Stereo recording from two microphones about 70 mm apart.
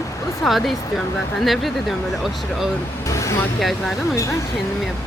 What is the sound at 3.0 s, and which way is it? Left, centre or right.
Vehicle, left.